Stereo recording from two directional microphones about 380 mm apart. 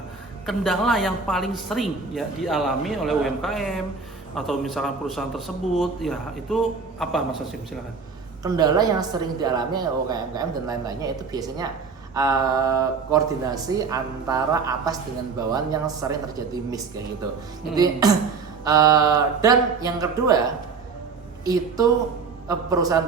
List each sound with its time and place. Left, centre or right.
0.4 s speech: centre
8.4 s a woman's voice: centre
18.0 s a woman's voice: centre
21.4 s a woman's voice: centre